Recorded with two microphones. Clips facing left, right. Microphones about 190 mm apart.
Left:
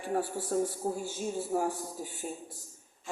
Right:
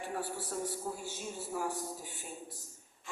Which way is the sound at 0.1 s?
45° left (ahead or behind).